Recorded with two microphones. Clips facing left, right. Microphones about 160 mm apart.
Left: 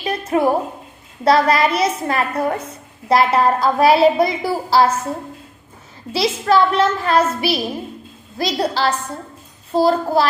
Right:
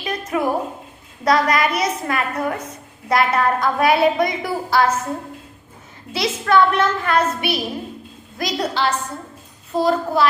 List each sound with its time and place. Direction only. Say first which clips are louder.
0.0 s a sound: left 4 dB; 30° left (ahead or behind)
1.2 s a woman's voice: left 3 dB; 30° left (ahead or behind)
6.1 s a woman's voice: left 1 dB; 30° left (ahead or behind)